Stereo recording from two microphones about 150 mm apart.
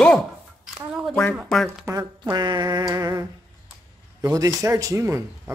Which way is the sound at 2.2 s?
30° right (ahead or behind).